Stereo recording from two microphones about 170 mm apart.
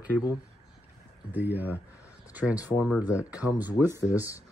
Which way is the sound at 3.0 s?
10° right (ahead or behind).